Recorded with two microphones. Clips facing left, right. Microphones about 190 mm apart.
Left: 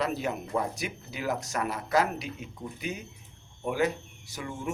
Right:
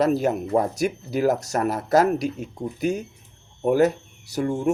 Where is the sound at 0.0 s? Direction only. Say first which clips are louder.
Right 10 dB; 40° right (ahead or behind).